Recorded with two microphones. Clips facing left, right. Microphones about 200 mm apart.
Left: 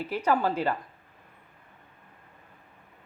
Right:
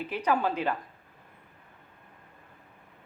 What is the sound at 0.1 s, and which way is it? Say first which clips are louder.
Speech: left 2 dB; 15° right (ahead or behind).